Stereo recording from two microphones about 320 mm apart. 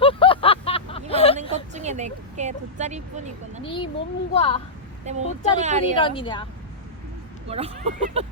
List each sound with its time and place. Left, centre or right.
0.0 s a sound: centre
1.4 s a sound: right
3.6 s speech: centre
5.0 s speech: right
6.0 s speech: centre
7.4 s speech: centre